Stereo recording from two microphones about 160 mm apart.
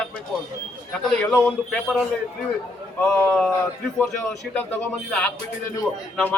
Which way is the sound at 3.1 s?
10° left (ahead or behind).